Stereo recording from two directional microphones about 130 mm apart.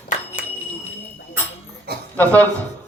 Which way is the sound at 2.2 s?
10° left (ahead or behind).